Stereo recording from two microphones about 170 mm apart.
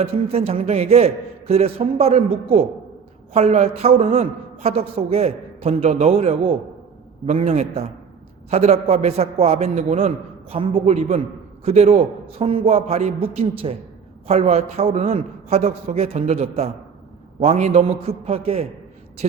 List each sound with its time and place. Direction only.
0.0 s a woman's voice: 35° right (ahead or behind)